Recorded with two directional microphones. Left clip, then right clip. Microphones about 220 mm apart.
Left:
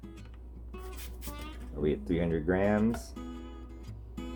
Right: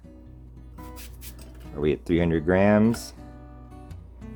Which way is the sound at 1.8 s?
50° right (ahead or behind).